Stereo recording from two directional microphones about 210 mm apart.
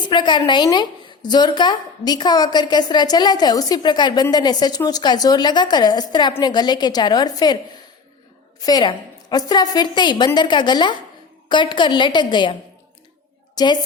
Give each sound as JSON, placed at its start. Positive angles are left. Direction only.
{"t": 0.1, "sound": "a woman's voice", "side_deg": 20}
{"t": 8.6, "sound": "a woman's voice", "side_deg": 20}
{"t": 13.6, "sound": "a woman's voice", "side_deg": 20}